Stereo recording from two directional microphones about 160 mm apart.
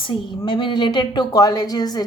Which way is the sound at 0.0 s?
30° left (ahead or behind).